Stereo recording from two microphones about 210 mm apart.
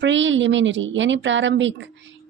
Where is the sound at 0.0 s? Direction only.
60° right (ahead or behind).